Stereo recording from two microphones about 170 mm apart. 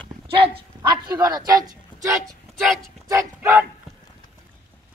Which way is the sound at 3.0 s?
15° right (ahead or behind).